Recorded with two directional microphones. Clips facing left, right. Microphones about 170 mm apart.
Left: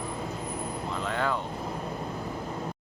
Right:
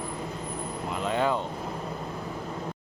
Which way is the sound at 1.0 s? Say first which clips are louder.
Right 4 dB; 20° right (ahead or behind).